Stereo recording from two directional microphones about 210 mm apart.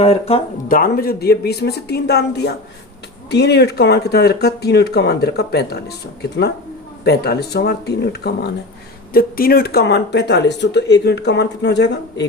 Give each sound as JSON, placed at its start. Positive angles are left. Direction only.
{"t": 0.0, "sound": "speech", "side_deg": 30}
{"t": 0.7, "sound": "speech", "side_deg": 45}
{"t": 7.0, "sound": "speech", "side_deg": 50}